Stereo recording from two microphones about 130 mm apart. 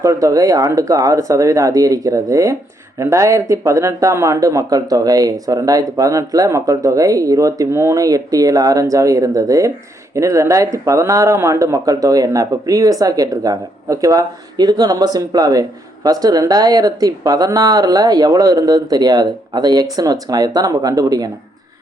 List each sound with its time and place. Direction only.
0.0 s speech: 25° right (ahead or behind)